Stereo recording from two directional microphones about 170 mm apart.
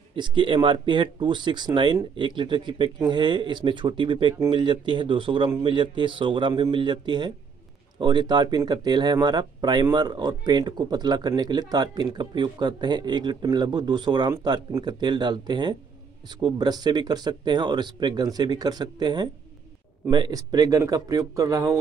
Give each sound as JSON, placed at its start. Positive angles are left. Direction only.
{"t": 0.1, "sound": "speech", "side_deg": -30}